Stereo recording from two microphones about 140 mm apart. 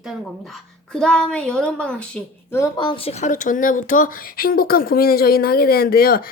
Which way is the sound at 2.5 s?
25° left (ahead or behind).